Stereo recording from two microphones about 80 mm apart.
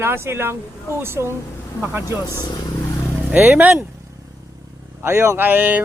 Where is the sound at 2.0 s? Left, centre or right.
Left.